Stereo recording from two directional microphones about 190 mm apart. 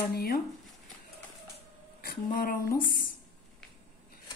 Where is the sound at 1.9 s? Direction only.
50° left (ahead or behind).